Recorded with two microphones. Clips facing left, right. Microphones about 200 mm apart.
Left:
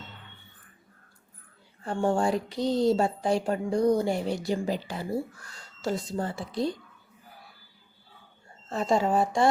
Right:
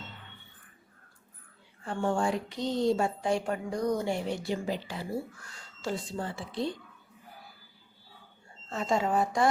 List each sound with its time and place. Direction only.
1.8 s speech: 35° left (ahead or behind)
8.7 s speech: 35° left (ahead or behind)